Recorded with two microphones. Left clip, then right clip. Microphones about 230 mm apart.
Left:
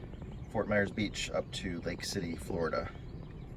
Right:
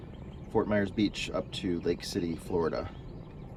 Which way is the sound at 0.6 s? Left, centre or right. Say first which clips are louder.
Right 2 dB; centre.